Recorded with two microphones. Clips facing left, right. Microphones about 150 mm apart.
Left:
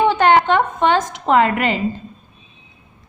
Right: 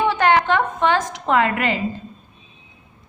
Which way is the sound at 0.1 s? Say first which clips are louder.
Left 3 dB; 25° left (ahead or behind).